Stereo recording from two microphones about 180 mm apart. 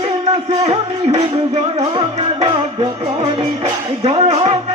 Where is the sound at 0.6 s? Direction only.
35° right (ahead or behind).